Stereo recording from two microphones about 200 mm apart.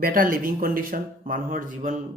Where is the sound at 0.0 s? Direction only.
45° right (ahead or behind).